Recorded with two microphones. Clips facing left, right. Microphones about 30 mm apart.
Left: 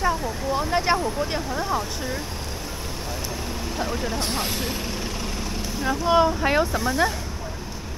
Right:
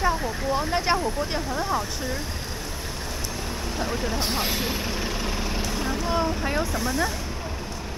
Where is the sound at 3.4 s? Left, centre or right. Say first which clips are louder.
Left 1 dB; centre.